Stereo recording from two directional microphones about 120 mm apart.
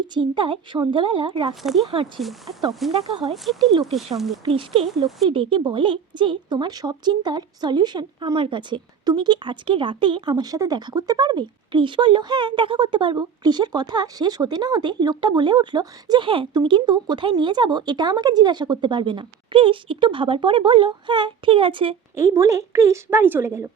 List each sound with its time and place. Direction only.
0.1 s a woman's voice: 40° right (ahead or behind)
1.6 s speech: centre (ahead or behind)
4.4 s a woman's voice: 50° right (ahead or behind)
22.1 s a woman's voice: 25° right (ahead or behind)